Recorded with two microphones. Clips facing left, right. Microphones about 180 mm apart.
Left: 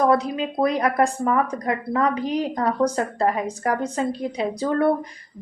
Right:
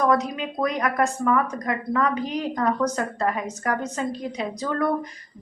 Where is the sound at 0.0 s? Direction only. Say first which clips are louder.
Left 2 dB; 30° left (ahead or behind).